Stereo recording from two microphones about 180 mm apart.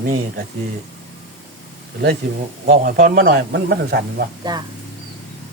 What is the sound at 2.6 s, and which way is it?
Speech, 50° right (ahead or behind).